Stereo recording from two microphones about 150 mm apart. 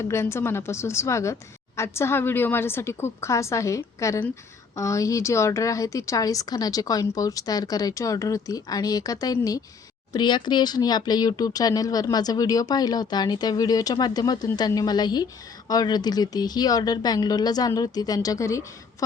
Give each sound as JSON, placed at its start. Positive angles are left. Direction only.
{"t": 0.0, "sound": "a woman's voice", "side_deg": 20}